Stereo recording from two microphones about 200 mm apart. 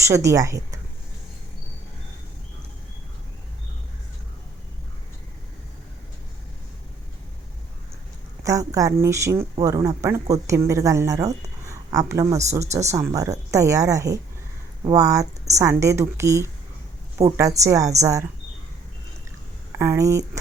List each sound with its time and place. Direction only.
0.0 s speech: 15° right (ahead or behind)
8.4 s speech: 15° right (ahead or behind)
11.6 s a sound: 15° right (ahead or behind)
12.3 s speech: 15° right (ahead or behind)
19.8 s speech: 15° right (ahead or behind)